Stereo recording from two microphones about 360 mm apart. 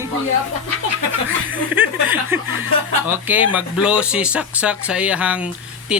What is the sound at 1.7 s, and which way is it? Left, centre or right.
Chuckle, centre.